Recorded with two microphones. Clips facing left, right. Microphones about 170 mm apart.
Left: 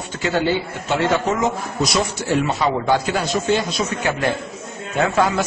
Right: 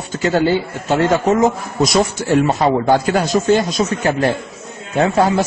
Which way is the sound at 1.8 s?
45° right (ahead or behind).